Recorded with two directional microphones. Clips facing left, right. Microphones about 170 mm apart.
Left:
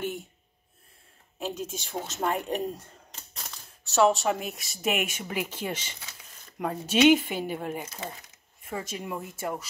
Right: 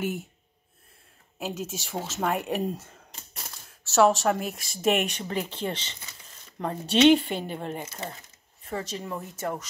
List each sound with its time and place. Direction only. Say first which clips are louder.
1.4 s speech: even; 5° right (ahead or behind)